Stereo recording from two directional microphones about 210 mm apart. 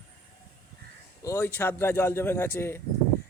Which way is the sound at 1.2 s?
10° left (ahead or behind).